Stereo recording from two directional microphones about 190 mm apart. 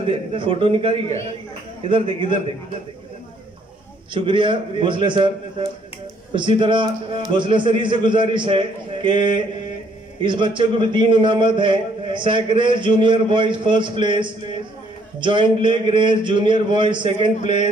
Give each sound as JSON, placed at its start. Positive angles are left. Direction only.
{"t": 0.0, "sound": "a man's voice", "side_deg": -30}
{"t": 4.1, "sound": "a man's voice", "side_deg": -25}
{"t": 6.3, "sound": "a man's voice", "side_deg": -25}